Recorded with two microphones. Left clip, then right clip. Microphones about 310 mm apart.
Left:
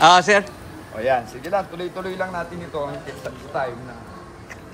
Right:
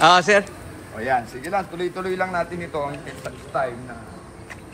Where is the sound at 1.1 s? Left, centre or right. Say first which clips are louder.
Left 2 dB; centre.